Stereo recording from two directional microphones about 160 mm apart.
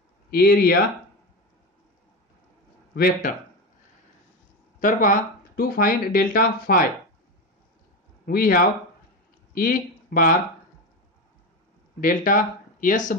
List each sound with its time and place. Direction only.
0.3 s speech: 75° left (ahead or behind)
2.9 s speech: 65° left (ahead or behind)
4.7 s speech: 60° left (ahead or behind)
8.3 s speech: 65° left (ahead or behind)
12.0 s speech: 60° left (ahead or behind)